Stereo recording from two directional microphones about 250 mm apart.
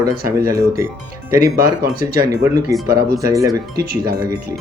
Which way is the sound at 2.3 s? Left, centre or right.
Centre.